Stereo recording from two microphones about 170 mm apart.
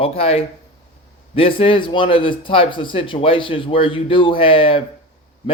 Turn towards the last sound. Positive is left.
turn(degrees=30)  # may be behind; listen again after turning